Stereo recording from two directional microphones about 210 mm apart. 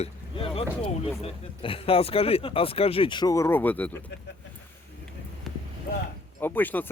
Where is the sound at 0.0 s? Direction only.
25° left (ahead or behind).